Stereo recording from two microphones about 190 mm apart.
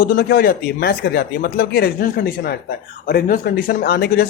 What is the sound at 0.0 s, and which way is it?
Speech, 55° left (ahead or behind).